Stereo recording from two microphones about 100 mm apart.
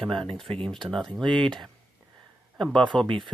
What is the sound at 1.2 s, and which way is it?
Speech, 55° right (ahead or behind).